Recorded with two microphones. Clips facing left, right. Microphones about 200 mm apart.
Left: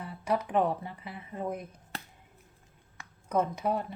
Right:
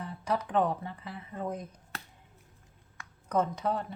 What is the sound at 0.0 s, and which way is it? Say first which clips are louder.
Speech: left 2 dB; 10° left (ahead or behind).